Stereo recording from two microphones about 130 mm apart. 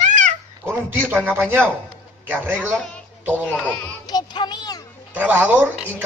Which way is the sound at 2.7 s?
10° left (ahead or behind).